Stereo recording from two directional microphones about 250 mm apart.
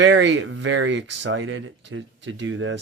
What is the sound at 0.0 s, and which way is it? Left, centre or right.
Speech, right.